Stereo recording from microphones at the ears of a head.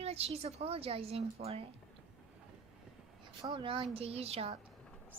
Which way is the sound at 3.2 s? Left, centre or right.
Right.